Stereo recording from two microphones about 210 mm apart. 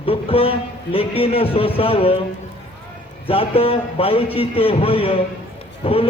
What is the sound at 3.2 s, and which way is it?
Speech, 25° left (ahead or behind).